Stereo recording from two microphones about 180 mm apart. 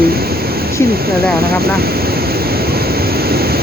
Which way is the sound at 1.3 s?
60° right (ahead or behind).